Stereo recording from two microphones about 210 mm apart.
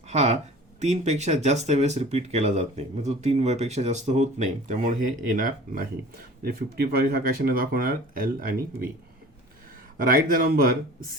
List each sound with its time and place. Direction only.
0.1 s speech: 35° right (ahead or behind)
10.0 s speech: 45° right (ahead or behind)